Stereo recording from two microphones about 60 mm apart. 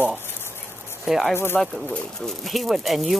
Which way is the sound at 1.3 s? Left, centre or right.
Left.